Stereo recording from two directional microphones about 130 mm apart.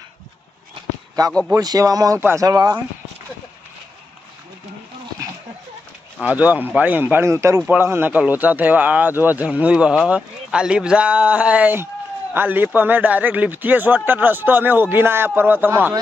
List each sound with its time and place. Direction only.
1.5 s speech: 30° right (ahead or behind)
6.2 s speech: 10° right (ahead or behind)